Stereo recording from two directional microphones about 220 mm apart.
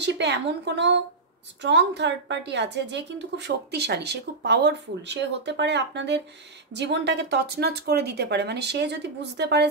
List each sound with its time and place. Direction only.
0.0 s a woman's voice: 50° right (ahead or behind)